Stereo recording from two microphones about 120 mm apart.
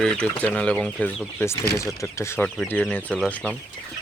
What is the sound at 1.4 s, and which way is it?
Speech, 25° left (ahead or behind).